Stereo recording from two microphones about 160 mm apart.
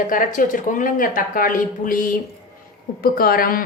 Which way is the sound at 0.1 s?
55° left (ahead or behind).